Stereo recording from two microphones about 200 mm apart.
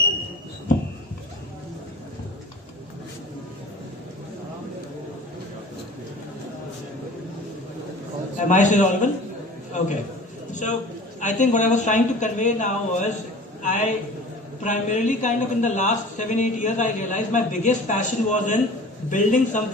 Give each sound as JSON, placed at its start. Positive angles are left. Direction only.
{"t": 8.4, "sound": "a man's voice", "side_deg": 40}